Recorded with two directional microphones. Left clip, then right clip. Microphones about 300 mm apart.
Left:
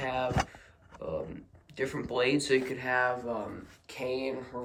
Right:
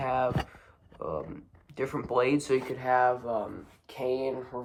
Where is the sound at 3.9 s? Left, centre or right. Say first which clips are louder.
Right 3 dB; right.